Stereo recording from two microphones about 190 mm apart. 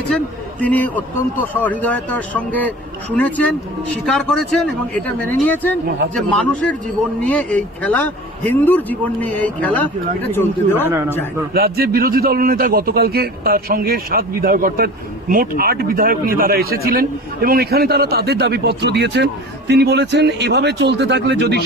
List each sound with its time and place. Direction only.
0.1 s a man's voice: 5° left (ahead or behind)
10.9 s a man's voice: 15° right (ahead or behind)
11.5 s a man's voice: 55° right (ahead or behind)